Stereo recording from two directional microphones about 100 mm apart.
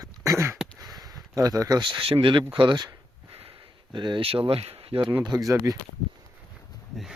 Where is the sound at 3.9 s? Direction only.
50° right (ahead or behind).